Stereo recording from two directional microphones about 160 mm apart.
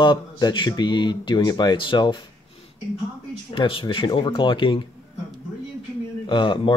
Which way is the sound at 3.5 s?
30° left (ahead or behind).